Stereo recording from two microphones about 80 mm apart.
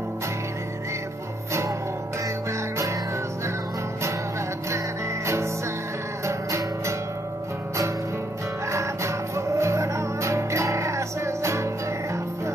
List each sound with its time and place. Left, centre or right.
4.6 s music: right
8.7 s music: right